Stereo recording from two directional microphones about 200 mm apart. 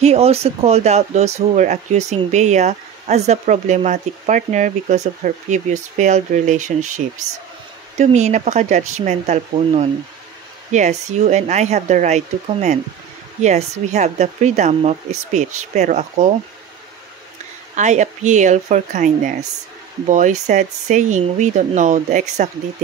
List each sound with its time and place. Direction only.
0.0 s speech: 30° right (ahead or behind)
8.0 s speech: 35° right (ahead or behind)
17.7 s speech: 35° right (ahead or behind)